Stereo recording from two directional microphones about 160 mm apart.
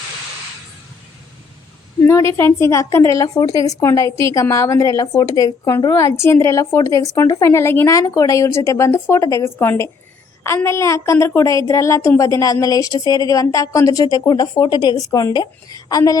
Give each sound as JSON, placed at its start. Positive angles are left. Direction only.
{"t": 2.0, "sound": "a woman's voice", "side_deg": 15}